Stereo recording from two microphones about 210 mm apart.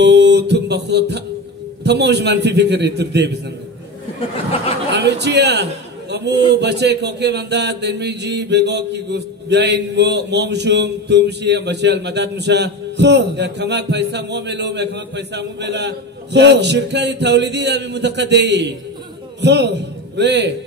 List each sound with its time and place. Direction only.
0.0 s a man's voice: 55° right (ahead or behind)
4.9 s a man's voice: 55° right (ahead or behind)